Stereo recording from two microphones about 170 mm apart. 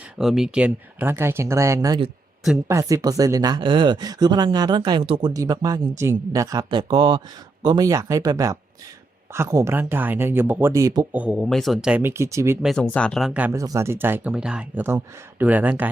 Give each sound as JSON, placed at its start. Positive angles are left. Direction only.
{"t": 0.2, "sound": "speech", "side_deg": 0}
{"t": 11.2, "sound": "speech", "side_deg": 0}
{"t": 12.6, "sound": "speech", "side_deg": 5}